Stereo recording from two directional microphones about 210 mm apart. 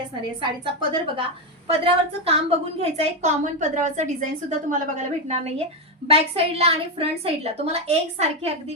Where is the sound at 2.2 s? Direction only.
30° right (ahead or behind).